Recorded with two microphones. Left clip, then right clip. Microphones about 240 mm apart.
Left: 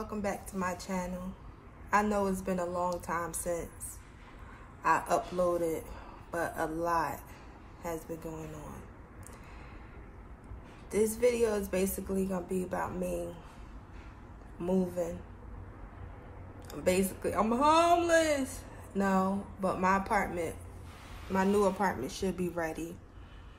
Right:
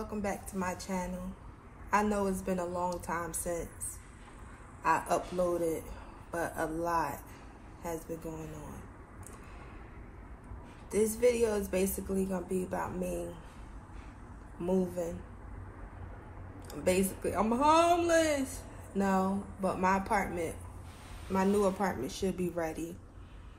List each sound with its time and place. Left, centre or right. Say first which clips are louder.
0.0 s a woman's voice: left 1 dB; centre
4.8 s a woman's voice: left 1 dB; centre
10.9 s a woman's voice: even; centre
14.6 s a woman's voice: even; centre
16.8 s a woman's voice: even; centre
21.6 s a woman's voice: left 1 dB; centre